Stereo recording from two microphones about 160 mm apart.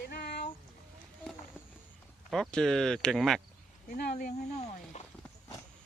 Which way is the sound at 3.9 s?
65° left (ahead or behind).